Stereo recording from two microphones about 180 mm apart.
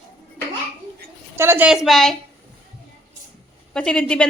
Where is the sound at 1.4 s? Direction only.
10° right (ahead or behind).